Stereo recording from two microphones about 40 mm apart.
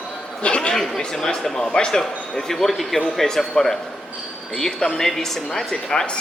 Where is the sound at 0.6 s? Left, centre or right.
Centre.